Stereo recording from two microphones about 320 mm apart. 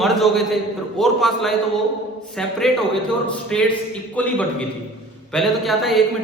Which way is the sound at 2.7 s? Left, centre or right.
Centre.